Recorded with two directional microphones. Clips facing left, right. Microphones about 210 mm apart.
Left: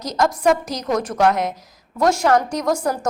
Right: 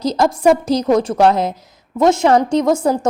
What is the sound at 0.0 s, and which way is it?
A woman's voice, 30° right (ahead or behind).